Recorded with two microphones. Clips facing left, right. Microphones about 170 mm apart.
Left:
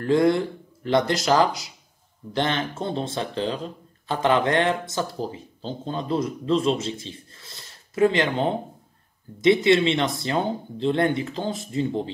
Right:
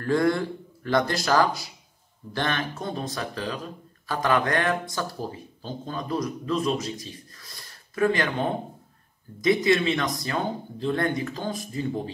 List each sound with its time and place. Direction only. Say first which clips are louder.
0.0 s speech: left 3 dB; 20° left (ahead or behind)